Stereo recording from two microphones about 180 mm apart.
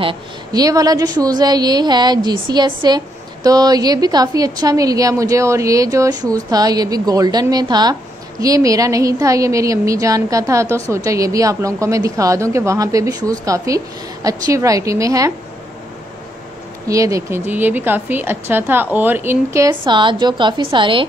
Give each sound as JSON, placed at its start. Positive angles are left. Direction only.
{"t": 0.0, "sound": "a woman's voice", "side_deg": -25}
{"t": 16.8, "sound": "a woman's voice", "side_deg": -20}